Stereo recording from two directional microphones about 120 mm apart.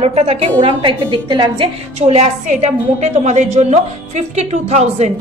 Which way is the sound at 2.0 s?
65° right (ahead or behind).